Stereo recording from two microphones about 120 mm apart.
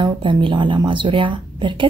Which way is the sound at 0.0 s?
45° right (ahead or behind).